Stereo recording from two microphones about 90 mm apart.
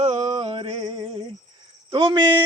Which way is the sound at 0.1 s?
85° right.